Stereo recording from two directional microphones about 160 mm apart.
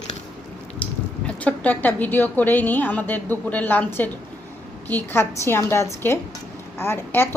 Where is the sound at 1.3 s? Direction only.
10° left (ahead or behind).